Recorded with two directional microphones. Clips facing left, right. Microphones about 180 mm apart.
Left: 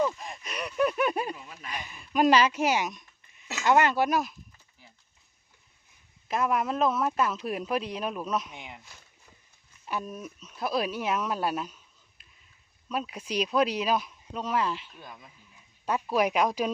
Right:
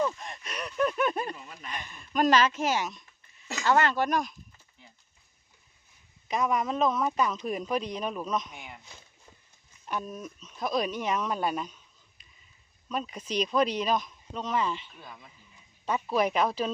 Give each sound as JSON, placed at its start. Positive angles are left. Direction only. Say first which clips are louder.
{"t": 0.0, "sound": "speech", "louder": "left 1 dB", "side_deg": 5}
{"t": 6.2, "sound": "a man's voice", "louder": "even", "side_deg": 5}
{"t": 8.5, "sound": "speech", "louder": "left 1 dB", "side_deg": 20}
{"t": 9.8, "sound": "speech", "louder": "even", "side_deg": 10}